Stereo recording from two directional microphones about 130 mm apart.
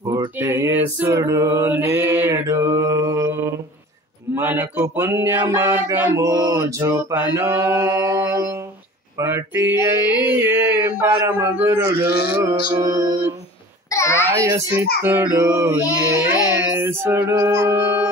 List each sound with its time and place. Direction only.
0.4 s mantra: 20° right (ahead or behind)
4.4 s a man's voice: 15° right (ahead or behind)
4.8 s mantra: 20° right (ahead or behind)
9.2 s a sound: 20° right (ahead or behind)
11.7 s mantra: 25° right (ahead or behind)
13.8 s a sound: 20° left (ahead or behind)
14.4 s mantra: 20° right (ahead or behind)
16.3 s music: 10° right (ahead or behind)